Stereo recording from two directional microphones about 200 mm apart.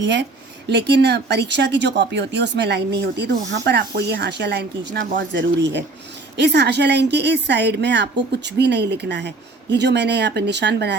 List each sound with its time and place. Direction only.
0.0 s speech: 65° right (ahead or behind)